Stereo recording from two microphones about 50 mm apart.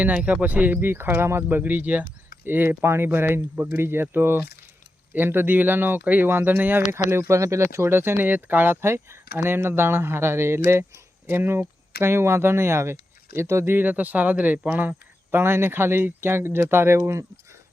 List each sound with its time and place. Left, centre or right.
0.0 s speech: right
0.8 s speech: right
1.5 s speech: right
6.9 s speech: right
7.9 s speech: right
13.7 s speech: right
15.4 s speech: right